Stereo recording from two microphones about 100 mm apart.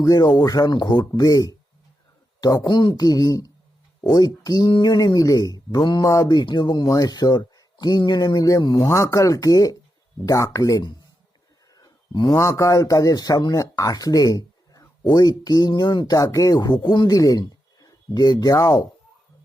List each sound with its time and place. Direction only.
0.0 s speech: 35° left (ahead or behind)
6.2 s speech: 45° left (ahead or behind)
8.6 s speech: 50° left (ahead or behind)
8.9 s speech: 30° left (ahead or behind)
11.7 s a sound: 45° left (ahead or behind)
12.4 s speech: 30° left (ahead or behind)